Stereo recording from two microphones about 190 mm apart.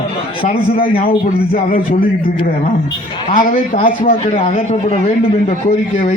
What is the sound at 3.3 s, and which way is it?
Speech, 45° left (ahead or behind).